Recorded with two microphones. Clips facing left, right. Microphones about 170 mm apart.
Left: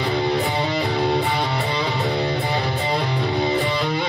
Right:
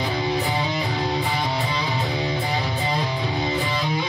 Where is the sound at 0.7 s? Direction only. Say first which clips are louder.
Left 4 dB; 65° left (ahead or behind).